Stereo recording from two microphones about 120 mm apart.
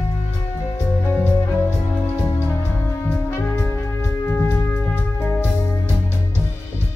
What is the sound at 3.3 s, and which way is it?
Music, 15° left (ahead or behind).